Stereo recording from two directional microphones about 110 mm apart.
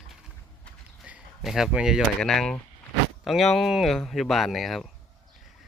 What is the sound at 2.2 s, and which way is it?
Speech, 5° left (ahead or behind).